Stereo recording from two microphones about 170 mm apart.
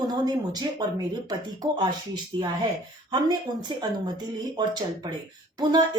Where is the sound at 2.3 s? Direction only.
25° right (ahead or behind).